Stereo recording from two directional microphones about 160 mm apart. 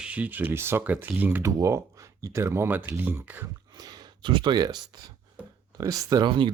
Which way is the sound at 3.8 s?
25° right (ahead or behind).